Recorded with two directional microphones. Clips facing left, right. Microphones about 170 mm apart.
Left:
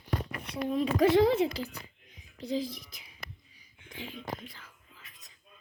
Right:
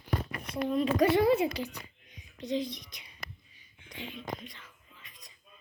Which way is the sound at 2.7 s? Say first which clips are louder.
Even; 5° left (ahead or behind).